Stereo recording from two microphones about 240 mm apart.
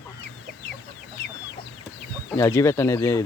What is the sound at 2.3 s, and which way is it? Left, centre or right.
Speech, centre.